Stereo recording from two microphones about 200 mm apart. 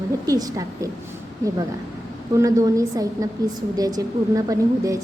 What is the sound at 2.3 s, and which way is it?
A woman's voice, 15° right (ahead or behind).